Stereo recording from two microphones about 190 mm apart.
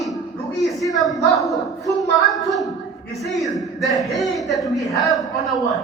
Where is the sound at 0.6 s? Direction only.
Centre (ahead or behind).